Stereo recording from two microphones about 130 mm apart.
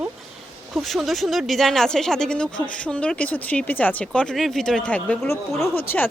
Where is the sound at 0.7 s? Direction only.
Centre (ahead or behind).